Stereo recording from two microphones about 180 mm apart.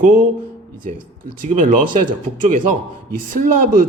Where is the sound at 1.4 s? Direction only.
50° right (ahead or behind).